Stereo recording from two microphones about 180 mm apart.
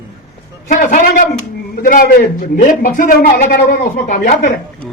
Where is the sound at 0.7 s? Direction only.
45° left (ahead or behind).